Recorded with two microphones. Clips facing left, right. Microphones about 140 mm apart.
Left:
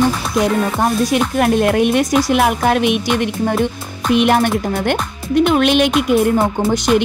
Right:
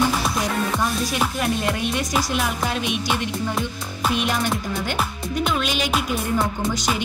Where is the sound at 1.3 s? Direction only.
60° left (ahead or behind).